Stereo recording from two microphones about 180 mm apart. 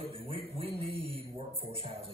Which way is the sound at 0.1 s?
30° right (ahead or behind).